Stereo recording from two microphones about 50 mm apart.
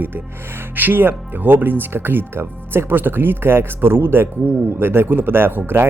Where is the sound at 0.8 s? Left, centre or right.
Right.